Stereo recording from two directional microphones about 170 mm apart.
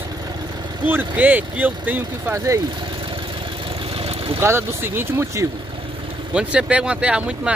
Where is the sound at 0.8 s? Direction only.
10° right (ahead or behind).